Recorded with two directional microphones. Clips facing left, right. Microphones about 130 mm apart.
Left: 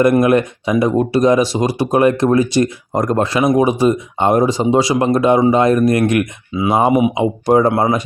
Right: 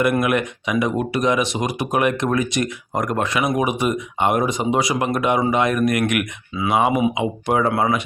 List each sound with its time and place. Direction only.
0.0 s speech: 35° left (ahead or behind)